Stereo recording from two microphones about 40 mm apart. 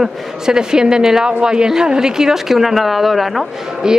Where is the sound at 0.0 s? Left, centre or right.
Centre.